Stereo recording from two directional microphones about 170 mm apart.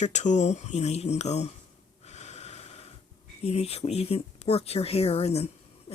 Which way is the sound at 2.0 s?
40° left (ahead or behind).